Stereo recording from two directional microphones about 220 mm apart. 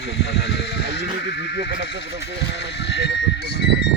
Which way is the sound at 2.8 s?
50° left (ahead or behind).